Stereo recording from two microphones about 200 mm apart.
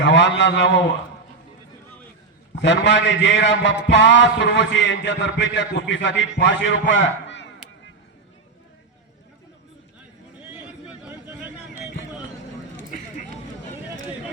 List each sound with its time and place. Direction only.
0.0 s a man's voice: 65° left (ahead or behind)
2.6 s a man's voice: 65° left (ahead or behind)
11.0 s a sound: 10° right (ahead or behind)